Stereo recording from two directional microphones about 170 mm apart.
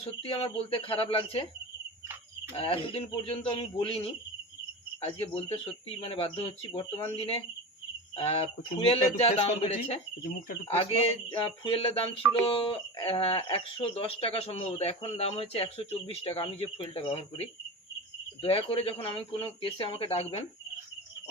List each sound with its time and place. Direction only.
0.0 s music: 35° left (ahead or behind)
2.6 s music: 30° left (ahead or behind)